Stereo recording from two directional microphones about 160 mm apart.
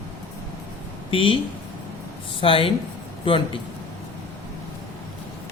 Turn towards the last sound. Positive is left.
turn(degrees=35)  # may be behind; listen again after turning